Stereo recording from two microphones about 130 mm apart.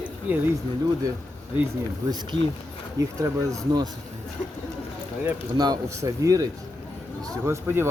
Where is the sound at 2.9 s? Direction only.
25° right (ahead or behind).